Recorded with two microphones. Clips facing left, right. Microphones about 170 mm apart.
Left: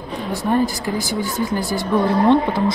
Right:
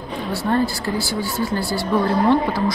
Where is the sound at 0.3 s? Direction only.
15° left (ahead or behind).